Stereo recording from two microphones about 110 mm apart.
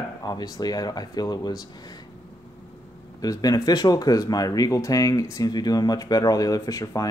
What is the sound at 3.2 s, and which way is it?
Speech, 35° left (ahead or behind).